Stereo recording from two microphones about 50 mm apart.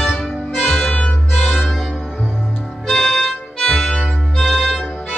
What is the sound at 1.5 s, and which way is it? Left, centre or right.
Music, centre.